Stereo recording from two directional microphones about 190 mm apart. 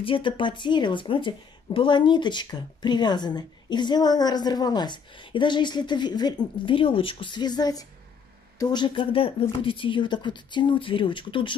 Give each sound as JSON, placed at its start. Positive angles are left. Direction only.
{"t": 0.0, "sound": "speech", "side_deg": 25}